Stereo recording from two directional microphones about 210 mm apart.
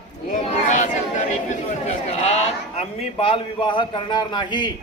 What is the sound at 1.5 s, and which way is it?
A man's voice, 30° left (ahead or behind).